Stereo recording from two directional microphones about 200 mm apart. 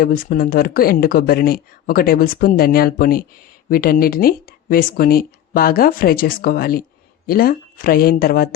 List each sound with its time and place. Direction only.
0.0 s speech: 45° left (ahead or behind)